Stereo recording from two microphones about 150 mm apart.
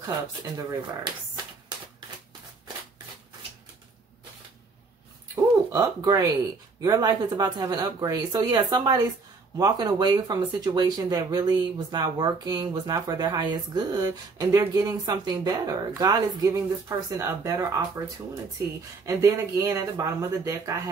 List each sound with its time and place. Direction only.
0.6 s speech: 30° right (ahead or behind)
5.3 s speech: 20° right (ahead or behind)
19.0 s speech: 20° right (ahead or behind)